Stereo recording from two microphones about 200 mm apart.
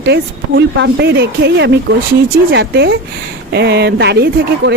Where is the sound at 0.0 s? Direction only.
60° right (ahead or behind).